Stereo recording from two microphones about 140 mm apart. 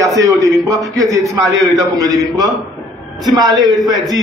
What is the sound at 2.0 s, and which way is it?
Speech, 25° right (ahead or behind).